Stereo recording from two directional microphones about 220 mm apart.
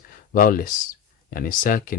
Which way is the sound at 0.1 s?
40° left (ahead or behind).